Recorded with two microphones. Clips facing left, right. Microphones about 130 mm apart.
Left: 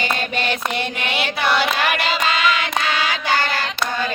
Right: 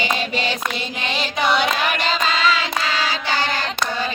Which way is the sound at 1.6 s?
5° left (ahead or behind).